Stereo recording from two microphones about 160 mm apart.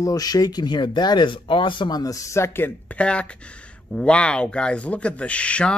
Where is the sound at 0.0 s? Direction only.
25° left (ahead or behind).